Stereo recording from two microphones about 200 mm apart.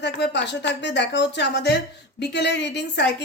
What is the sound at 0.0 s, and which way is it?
Speech, 60° left (ahead or behind).